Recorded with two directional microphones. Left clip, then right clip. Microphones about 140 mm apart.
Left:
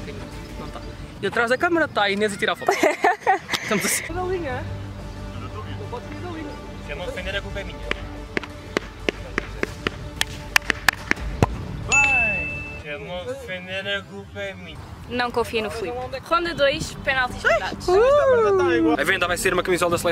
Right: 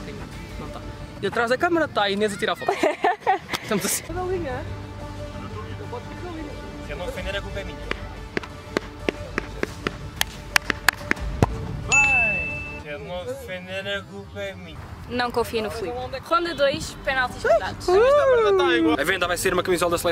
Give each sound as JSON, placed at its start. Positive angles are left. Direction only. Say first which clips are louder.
{"t": 1.2, "sound": "speech", "louder": "left 1 dB", "side_deg": 0}
{"t": 2.6, "sound": "a sound", "louder": "left 3 dB", "side_deg": 20}
{"t": 3.5, "sound": "speech", "louder": "left 3 dB", "side_deg": 0}
{"t": 6.9, "sound": "music", "louder": "left 1 dB", "side_deg": -5}
{"t": 12.8, "sound": "speech", "louder": "left 1 dB", "side_deg": -10}
{"t": 18.6, "sound": "speech", "louder": "even", "side_deg": -25}
{"t": 18.9, "sound": "speech", "louder": "left 2 dB", "side_deg": 0}